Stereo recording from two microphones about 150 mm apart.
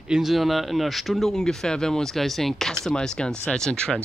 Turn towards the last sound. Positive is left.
turn(degrees=5)  # may be behind; listen again after turning